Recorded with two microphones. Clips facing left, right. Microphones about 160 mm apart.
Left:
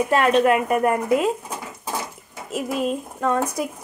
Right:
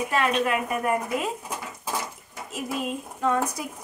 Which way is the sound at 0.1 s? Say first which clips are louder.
Left 7 dB; 50° left (ahead or behind).